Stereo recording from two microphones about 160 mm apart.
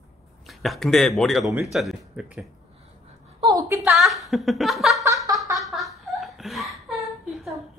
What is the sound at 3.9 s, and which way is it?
A woman's voice, centre (ahead or behind).